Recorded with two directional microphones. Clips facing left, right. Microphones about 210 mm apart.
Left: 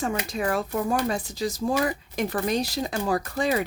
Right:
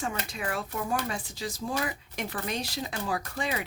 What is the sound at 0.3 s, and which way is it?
Speech, 40° left (ahead or behind).